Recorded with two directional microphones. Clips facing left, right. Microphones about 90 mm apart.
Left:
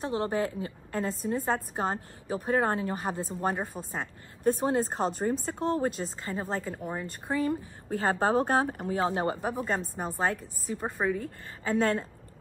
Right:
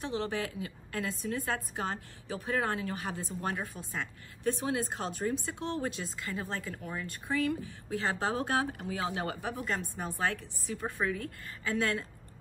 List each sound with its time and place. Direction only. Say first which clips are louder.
0.0 s a woman's voice: left 5 dB; 35° left (ahead or behind)
9.5 s a woman's voice: left 4 dB; 25° left (ahead or behind)